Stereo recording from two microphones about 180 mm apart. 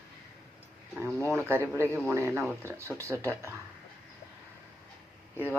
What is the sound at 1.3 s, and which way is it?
Speech, 10° right (ahead or behind).